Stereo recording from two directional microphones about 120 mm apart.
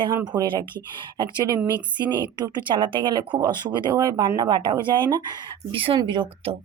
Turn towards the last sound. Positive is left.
turn(degrees=-40)  # may be behind; listen again after turning